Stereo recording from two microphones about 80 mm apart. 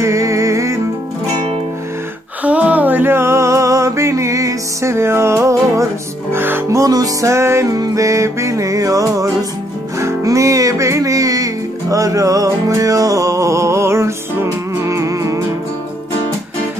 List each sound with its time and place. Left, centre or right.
0.0 s music: right
2.4 s a sound: centre; by 5.9 s right
6.3 s music: right
6.7 s music: right